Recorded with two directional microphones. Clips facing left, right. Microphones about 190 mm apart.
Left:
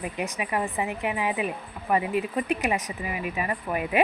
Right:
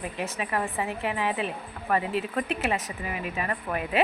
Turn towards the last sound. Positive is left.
turn(degrees=15)  # may be behind; listen again after turning